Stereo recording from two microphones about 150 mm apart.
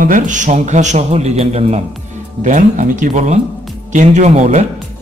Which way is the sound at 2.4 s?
60° right (ahead or behind).